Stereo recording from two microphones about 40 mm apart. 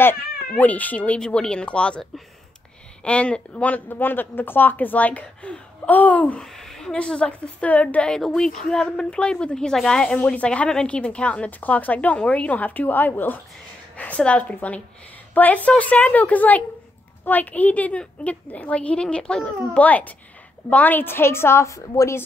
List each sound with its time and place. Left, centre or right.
0.6 s a woman's voice: left
1.2 s a woman's voice: centre
3.0 s a woman's voice: left
3.9 s speech: left
6.4 s a sound: centre
7.0 s a woman's voice: left
7.6 s a woman's voice: left
8.1 s a woman's voice: centre
10.2 s a woman's voice: left
13.9 s a woman's voice: left
19.7 s a woman's voice: left
21.0 s a woman's voice: left